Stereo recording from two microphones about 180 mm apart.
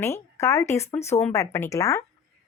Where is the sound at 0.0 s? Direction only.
15° left (ahead or behind).